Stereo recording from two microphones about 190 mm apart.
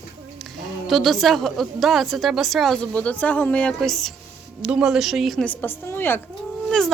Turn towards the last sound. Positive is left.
turn(degrees=5)  # may be behind; listen again after turning